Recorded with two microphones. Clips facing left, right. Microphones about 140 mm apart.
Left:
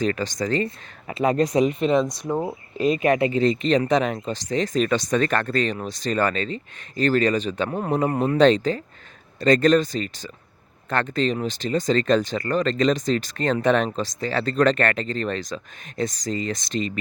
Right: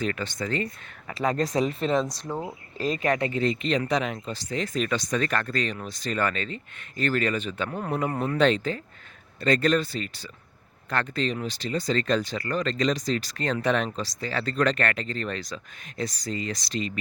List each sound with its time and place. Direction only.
0.0 s speech: 35° left (ahead or behind)
1.0 s speech: 20° left (ahead or behind)
1.5 s speech: 10° left (ahead or behind)
2.2 s speech: 30° left (ahead or behind)
2.7 s speech: 10° left (ahead or behind)
3.0 s speech: 20° left (ahead or behind)
3.4 s speech: 35° left (ahead or behind)
8.4 s speech: 40° left (ahead or behind)